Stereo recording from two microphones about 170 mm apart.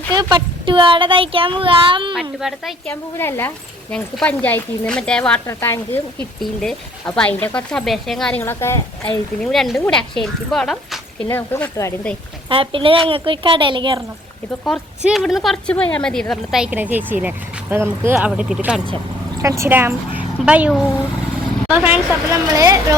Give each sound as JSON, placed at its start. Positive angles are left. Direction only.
{"t": 0.1, "sound": "speech", "side_deg": -25}
{"t": 2.4, "sound": "speech", "side_deg": 0}
{"t": 2.9, "sound": "speech", "side_deg": 15}
{"t": 6.4, "sound": "speech", "side_deg": 0}
{"t": 8.4, "sound": "speech", "side_deg": 15}
{"t": 9.4, "sound": "speech", "side_deg": 0}
{"t": 11.3, "sound": "speech", "side_deg": 15}
{"t": 12.5, "sound": "speech", "side_deg": -30}
{"t": 14.6, "sound": "speech", "side_deg": 0}
{"t": 18.3, "sound": "speech", "side_deg": -5}
{"t": 19.4, "sound": "speech", "side_deg": -15}